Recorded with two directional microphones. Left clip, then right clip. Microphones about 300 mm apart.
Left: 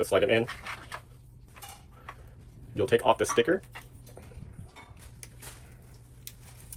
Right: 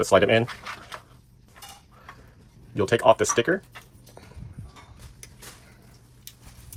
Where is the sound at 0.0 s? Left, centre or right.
Centre.